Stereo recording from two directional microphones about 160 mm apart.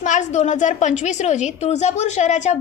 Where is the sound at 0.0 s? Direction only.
50° left (ahead or behind).